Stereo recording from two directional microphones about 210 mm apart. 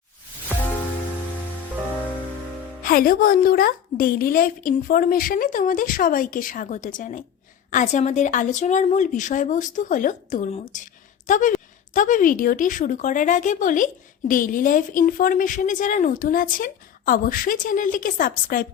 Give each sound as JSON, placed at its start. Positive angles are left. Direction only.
{"t": 2.8, "sound": "a woman's voice", "side_deg": 45}